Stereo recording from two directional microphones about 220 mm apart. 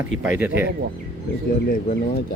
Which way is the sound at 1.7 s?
40° left (ahead or behind).